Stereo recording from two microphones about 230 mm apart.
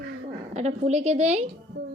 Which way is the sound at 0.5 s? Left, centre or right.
Right.